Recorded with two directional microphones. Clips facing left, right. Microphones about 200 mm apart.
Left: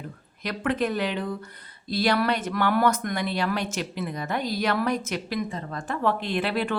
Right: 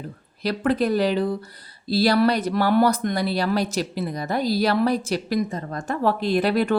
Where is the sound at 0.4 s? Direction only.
35° right (ahead or behind).